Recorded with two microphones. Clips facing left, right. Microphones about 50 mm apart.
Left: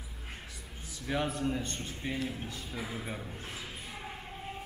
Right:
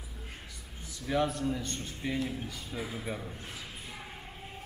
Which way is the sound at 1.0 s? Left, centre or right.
Centre.